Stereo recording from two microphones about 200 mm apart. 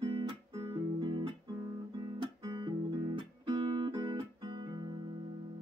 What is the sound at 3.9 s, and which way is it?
Music, 25° right (ahead or behind).